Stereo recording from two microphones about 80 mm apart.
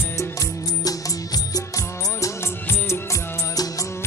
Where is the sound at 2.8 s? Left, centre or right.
Left.